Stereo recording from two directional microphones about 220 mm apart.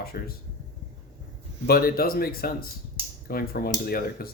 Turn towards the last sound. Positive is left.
turn(degrees=45)  # may be behind; listen again after turning